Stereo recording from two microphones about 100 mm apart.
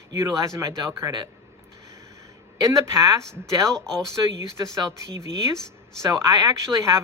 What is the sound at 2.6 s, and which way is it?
Speech, 30° right (ahead or behind).